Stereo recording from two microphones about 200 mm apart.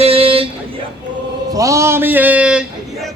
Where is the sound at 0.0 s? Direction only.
30° right (ahead or behind).